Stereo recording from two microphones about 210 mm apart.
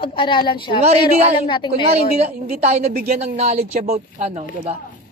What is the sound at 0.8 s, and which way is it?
Speech, 30° right (ahead or behind).